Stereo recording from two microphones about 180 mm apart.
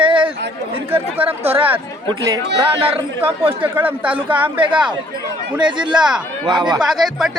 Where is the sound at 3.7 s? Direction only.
10° right (ahead or behind).